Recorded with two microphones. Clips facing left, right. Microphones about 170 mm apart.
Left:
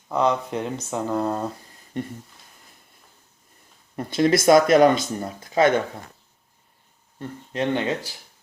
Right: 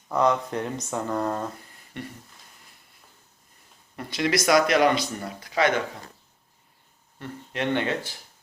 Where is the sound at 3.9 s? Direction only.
45° left (ahead or behind).